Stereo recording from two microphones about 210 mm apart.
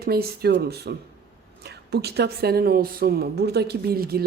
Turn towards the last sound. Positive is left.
turn(degrees=-45)  # may be behind; listen again after turning